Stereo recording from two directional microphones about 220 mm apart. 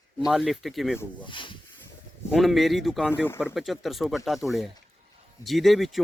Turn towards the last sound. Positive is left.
turn(degrees=0)  # may be behind; listen again after turning